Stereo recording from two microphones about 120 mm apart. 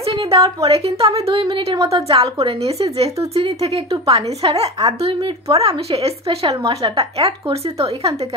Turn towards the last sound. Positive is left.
turn(degrees=-55)  # may be behind; listen again after turning